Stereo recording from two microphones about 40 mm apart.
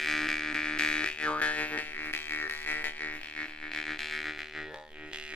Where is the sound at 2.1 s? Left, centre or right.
Left.